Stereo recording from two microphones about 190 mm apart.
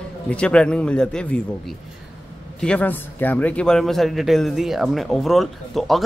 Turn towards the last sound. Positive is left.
turn(degrees=0)  # may be behind; listen again after turning